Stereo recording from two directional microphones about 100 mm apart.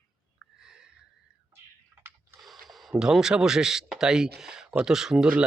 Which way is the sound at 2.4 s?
Centre (ahead or behind).